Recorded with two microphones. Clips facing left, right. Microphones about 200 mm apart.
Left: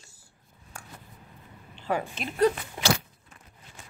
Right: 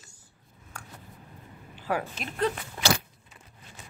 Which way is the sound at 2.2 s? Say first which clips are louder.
Left 3 dB; centre (ahead or behind).